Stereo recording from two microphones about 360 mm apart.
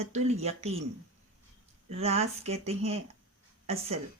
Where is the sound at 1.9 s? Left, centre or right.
Centre.